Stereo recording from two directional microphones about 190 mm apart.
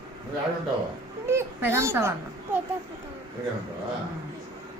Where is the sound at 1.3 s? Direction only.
15° right (ahead or behind).